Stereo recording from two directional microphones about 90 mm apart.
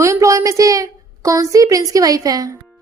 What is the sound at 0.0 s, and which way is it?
A woman's voice, 35° right (ahead or behind).